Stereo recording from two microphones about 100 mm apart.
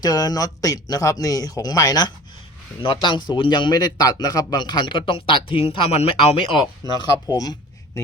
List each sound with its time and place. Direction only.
0.0 s speech: 40° left (ahead or behind)
2.8 s a man's voice: 60° left (ahead or behind); by 6.4 s 80° left
7.0 s speech: 40° left (ahead or behind)